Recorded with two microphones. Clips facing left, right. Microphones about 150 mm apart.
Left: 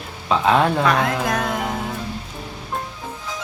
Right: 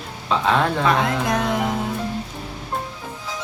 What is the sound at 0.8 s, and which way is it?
Speech, 20° right (ahead or behind).